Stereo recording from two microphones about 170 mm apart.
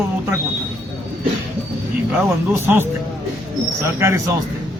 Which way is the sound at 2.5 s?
15° right (ahead or behind).